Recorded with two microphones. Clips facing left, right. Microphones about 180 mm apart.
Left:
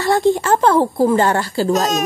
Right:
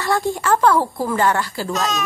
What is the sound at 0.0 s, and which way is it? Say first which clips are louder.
A woman's voice: left 6 dB; 25° left (ahead or behind).